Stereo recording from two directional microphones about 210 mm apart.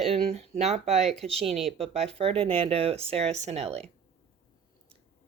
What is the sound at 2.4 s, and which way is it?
Speech, 25° right (ahead or behind).